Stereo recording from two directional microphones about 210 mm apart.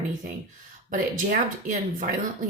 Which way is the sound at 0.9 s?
40° right (ahead or behind).